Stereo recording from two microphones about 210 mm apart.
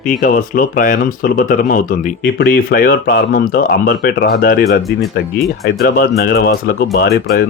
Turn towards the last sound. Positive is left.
turn(degrees=50)  # may be behind; listen again after turning